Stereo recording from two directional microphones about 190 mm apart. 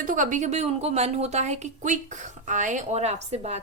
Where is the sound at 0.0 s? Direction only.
45° right (ahead or behind).